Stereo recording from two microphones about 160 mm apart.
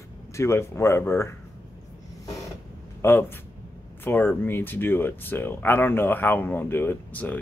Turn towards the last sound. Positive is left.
turn(degrees=10)  # may be behind; listen again after turning